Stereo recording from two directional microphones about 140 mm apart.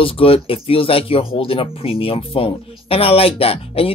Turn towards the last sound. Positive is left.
turn(degrees=45)  # may be behind; listen again after turning